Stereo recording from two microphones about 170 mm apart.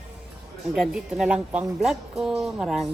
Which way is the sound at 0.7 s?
5° right (ahead or behind).